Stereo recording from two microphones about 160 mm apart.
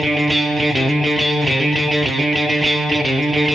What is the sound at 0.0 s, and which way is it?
Music, centre (ahead or behind).